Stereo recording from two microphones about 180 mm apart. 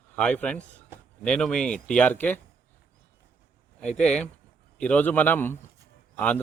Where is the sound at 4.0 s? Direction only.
5° left (ahead or behind).